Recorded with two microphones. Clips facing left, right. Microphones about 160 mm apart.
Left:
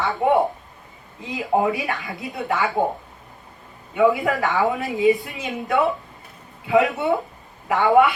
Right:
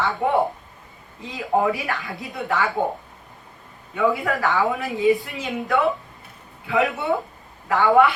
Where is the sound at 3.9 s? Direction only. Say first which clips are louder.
Left 3 dB; 20° left (ahead or behind).